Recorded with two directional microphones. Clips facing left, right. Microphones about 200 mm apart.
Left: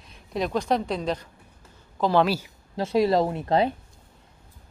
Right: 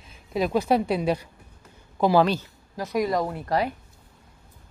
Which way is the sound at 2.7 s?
25° left (ahead or behind).